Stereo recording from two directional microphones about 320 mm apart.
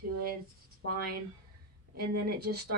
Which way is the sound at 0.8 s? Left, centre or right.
Right.